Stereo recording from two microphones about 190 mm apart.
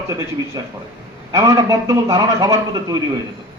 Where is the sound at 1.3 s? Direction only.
20° right (ahead or behind).